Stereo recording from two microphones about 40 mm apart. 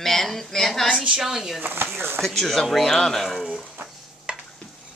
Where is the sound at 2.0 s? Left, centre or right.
Right.